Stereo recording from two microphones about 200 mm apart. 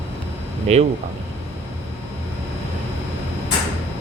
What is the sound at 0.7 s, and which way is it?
Speech, 35° right (ahead or behind).